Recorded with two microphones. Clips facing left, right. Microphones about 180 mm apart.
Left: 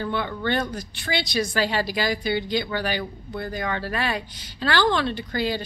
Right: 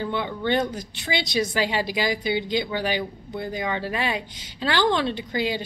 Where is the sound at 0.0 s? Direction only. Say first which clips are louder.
Even; 15° right (ahead or behind).